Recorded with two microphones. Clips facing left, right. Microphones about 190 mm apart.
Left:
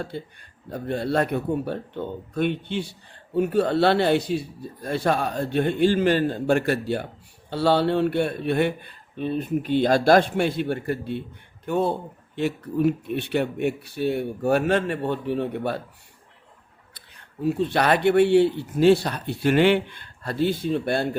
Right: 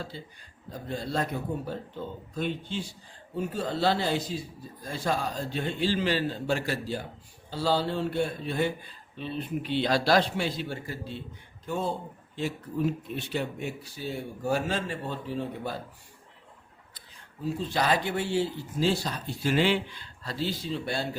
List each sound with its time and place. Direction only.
0.1 s a man's voice: 55° left (ahead or behind)
16.9 s speech: 65° left (ahead or behind)